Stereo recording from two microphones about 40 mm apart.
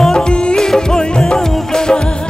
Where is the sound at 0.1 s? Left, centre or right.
Left.